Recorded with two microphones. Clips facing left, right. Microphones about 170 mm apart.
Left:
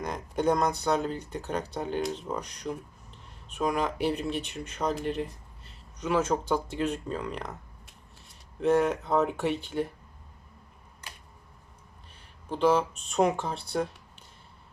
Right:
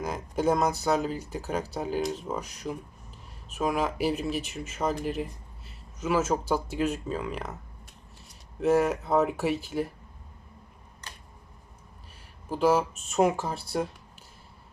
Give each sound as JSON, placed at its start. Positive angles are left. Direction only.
{"t": 0.0, "sound": "speech", "side_deg": -5}
{"t": 11.0, "sound": "a sound", "side_deg": 10}
{"t": 12.1, "sound": "speech", "side_deg": -5}